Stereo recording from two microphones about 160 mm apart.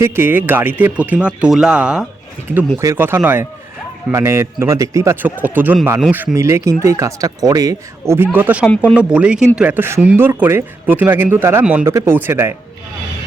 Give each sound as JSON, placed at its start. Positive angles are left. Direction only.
{"t": 0.0, "sound": "speech", "side_deg": -10}